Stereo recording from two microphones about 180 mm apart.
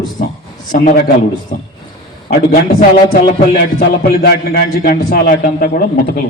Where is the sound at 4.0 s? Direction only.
65° left (ahead or behind).